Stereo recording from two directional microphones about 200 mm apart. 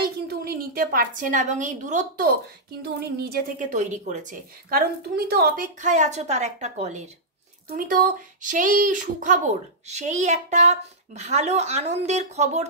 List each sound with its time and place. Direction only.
0.0 s a woman's voice: 50° right (ahead or behind)
2.8 s a woman's voice: 50° right (ahead or behind); by 12.6 s 35° right (ahead or behind)